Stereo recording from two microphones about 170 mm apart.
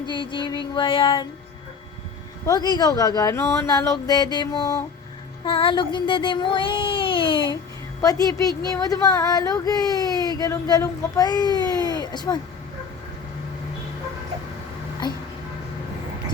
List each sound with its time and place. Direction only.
0.0 s speech: 30° left (ahead or behind)
2.5 s speech: 25° left (ahead or behind)
5.5 s speech: 30° left (ahead or behind)